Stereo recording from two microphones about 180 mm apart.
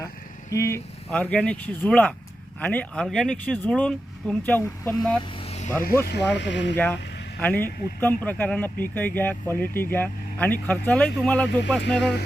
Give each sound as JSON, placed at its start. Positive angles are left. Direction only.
{"t": 0.5, "sound": "speech", "side_deg": 15}
{"t": 5.5, "sound": "vehicle", "side_deg": 40}
{"t": 6.1, "sound": "speech", "side_deg": 75}
{"t": 7.3, "sound": "speech", "side_deg": 10}
{"t": 11.9, "sound": "speech", "side_deg": 70}